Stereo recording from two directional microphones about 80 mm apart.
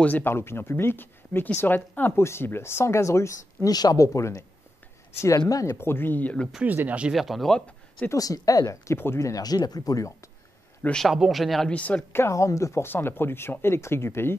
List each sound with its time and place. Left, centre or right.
0.0 s speech: left
5.5 s speech: left
5.8 s speech: left
6.6 s speech: right
7.1 s speech: centre
8.1 s speech: left
9.3 s speech: left
11.0 s speech: centre
11.7 s speech: centre
12.1 s speech: left
12.8 s speech: left